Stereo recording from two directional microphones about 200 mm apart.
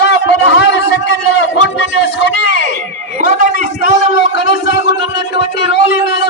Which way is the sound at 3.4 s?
40° right (ahead or behind).